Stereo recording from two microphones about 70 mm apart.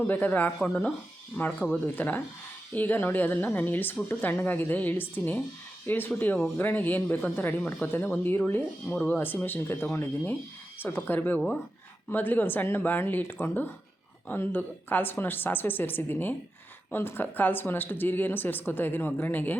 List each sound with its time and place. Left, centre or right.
0.1 s speech: left
1.4 s speech: left
2.0 s speech: left